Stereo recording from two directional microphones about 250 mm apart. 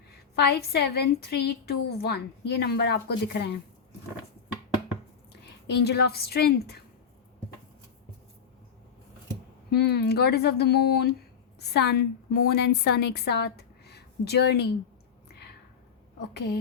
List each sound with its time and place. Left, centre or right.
0.3 s a woman's voice: left
5.6 s a woman's voice: left
9.6 s a woman's voice: left